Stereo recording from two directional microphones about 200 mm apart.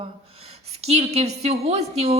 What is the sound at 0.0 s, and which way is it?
A woman's voice, 30° right (ahead or behind).